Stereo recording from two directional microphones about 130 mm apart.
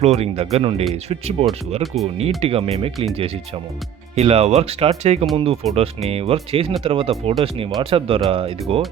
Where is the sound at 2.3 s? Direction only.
50° right (ahead or behind).